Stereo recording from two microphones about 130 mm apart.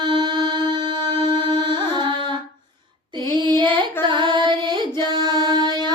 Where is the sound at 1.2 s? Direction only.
35° right (ahead or behind).